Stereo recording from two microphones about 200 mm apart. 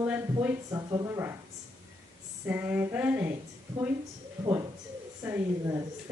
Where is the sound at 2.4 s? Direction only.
10° right (ahead or behind).